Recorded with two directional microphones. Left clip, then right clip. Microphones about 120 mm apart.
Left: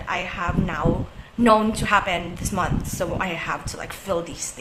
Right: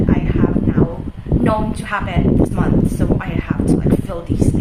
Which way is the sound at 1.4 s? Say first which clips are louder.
Left 3 dB; 35° left (ahead or behind).